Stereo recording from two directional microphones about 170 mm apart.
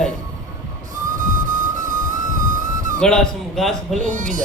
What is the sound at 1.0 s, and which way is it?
Music, 50° right (ahead or behind).